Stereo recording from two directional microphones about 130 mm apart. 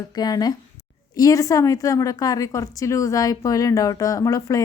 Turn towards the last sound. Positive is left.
turn(degrees=25)  # may be behind; listen again after turning